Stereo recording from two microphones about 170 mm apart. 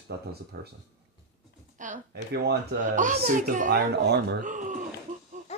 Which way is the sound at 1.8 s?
50° right (ahead or behind).